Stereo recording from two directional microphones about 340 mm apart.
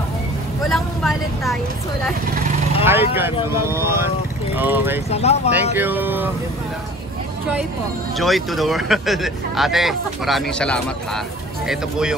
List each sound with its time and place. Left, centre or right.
0.7 s vehicle: centre
2.8 s speech: centre
5.1 s speech: centre
5.5 s speech: centre
8.2 s speech: centre